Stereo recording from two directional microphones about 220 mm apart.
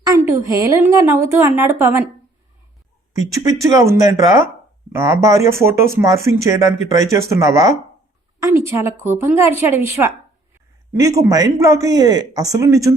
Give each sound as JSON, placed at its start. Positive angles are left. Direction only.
{"t": 0.0, "sound": "a woman's voice", "side_deg": -15}
{"t": 3.1, "sound": "a woman's voice", "side_deg": -15}